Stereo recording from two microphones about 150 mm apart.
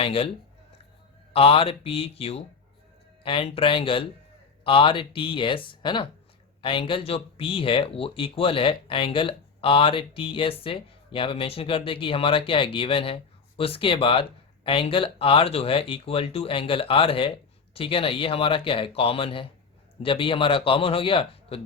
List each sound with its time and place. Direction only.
0.0 s speech: 40° left (ahead or behind)
1.3 s speech: 40° left (ahead or behind)